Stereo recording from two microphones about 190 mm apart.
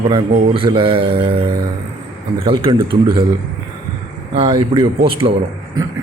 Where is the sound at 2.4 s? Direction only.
25° right (ahead or behind).